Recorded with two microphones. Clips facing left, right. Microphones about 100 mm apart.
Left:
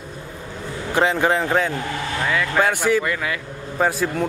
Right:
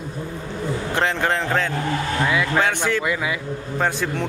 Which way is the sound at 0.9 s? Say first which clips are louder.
Left 4 dB; 5° left (ahead or behind).